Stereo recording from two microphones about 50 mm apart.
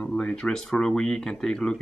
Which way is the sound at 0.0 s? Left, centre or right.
Left.